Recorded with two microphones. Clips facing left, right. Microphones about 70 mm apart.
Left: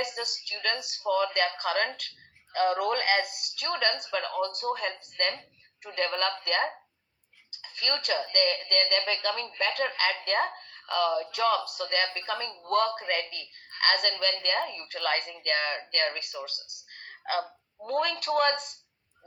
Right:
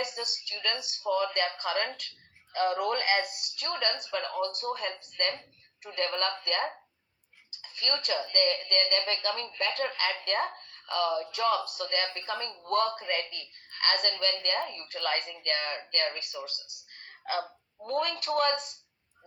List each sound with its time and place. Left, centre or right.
0.2 s a woman's voice: left